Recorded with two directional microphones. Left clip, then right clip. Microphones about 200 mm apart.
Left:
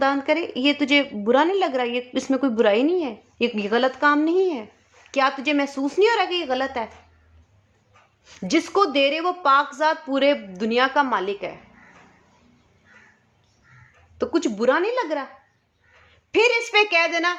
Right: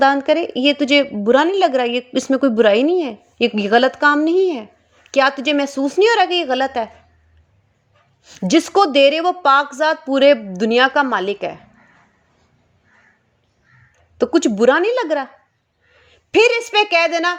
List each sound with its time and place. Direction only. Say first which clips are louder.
0.0 s a woman's voice: right 7 dB; 25° right (ahead or behind)
8.2 s a woman's voice: right 7 dB; 25° right (ahead or behind)
14.2 s speech: right 8 dB; 35° right (ahead or behind)
16.3 s a woman's voice: right 5 dB; 25° right (ahead or behind)